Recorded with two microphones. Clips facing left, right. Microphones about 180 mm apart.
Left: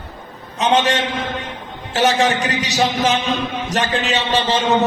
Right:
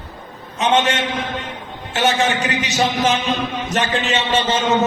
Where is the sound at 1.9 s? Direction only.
35° left (ahead or behind).